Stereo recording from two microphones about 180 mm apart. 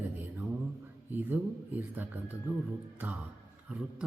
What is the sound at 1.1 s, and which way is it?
A man's voice, 10° right (ahead or behind).